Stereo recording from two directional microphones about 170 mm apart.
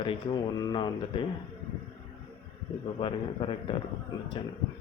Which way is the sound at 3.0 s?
30° left (ahead or behind).